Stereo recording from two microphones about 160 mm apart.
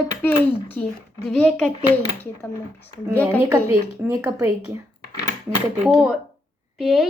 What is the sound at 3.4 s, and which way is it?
Speech, 20° right (ahead or behind).